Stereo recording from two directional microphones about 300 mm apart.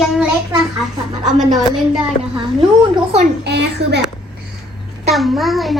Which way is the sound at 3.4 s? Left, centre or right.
Right.